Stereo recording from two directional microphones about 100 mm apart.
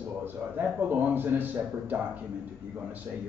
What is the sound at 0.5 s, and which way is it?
A man's voice, 20° right (ahead or behind).